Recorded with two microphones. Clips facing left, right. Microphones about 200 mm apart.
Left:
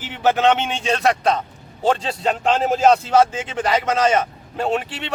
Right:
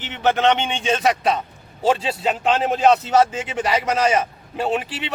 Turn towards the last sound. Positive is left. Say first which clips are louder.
# left 1 dB
turn(degrees=-5)  # may be behind; listen again after turning